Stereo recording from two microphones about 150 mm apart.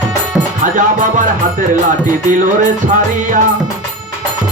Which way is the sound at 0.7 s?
60° right (ahead or behind).